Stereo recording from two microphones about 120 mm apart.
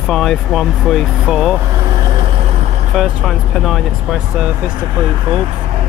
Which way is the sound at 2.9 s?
Centre (ahead or behind).